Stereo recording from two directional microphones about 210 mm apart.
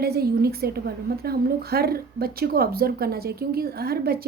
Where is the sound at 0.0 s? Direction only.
45° right (ahead or behind).